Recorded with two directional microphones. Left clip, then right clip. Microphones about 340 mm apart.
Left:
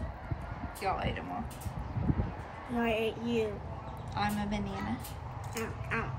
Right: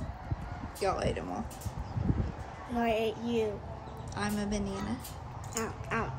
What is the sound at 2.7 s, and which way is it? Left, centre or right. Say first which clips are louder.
A child's voice: right 1 dB; centre.